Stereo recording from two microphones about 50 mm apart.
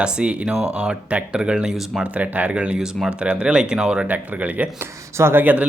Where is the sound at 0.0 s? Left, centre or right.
Right.